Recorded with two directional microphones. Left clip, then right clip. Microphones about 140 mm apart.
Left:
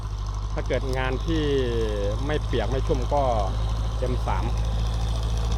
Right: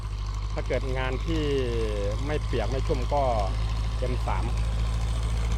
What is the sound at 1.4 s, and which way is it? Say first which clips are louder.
Speech: left 3 dB; 20° left (ahead or behind).